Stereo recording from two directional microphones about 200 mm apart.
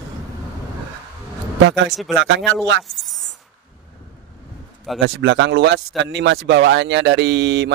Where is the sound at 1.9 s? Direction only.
Centre (ahead or behind).